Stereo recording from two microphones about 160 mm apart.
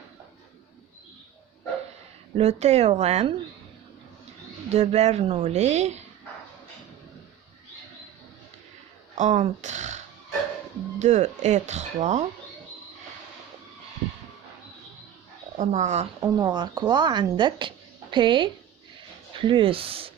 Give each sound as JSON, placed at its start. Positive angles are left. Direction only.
{"t": 2.3, "sound": "speech", "side_deg": -45}
{"t": 4.7, "sound": "speech", "side_deg": -45}
{"t": 9.1, "sound": "speech", "side_deg": -50}
{"t": 11.0, "sound": "speech", "side_deg": -45}
{"t": 15.5, "sound": "speech", "side_deg": -50}
{"t": 16.2, "sound": "speech", "side_deg": -25}